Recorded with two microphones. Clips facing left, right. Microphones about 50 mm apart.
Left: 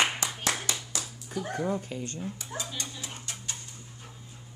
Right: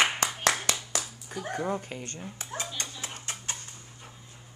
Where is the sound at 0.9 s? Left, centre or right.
Right.